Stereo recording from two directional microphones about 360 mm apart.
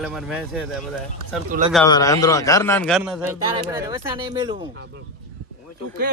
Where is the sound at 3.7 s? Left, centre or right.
Centre.